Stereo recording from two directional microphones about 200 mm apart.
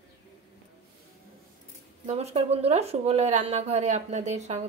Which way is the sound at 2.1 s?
30° right (ahead or behind).